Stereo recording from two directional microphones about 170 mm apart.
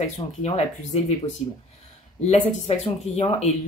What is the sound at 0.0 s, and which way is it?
Speech, 45° left (ahead or behind).